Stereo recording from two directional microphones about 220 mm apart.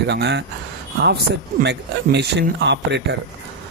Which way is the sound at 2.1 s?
50° right (ahead or behind).